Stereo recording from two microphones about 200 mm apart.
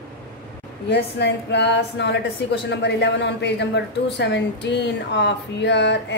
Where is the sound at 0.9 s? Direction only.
60° left (ahead or behind).